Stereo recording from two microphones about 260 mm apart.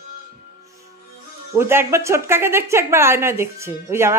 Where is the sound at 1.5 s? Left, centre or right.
Centre.